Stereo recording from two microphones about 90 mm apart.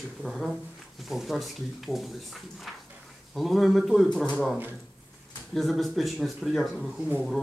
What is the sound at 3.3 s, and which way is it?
Speech, centre (ahead or behind).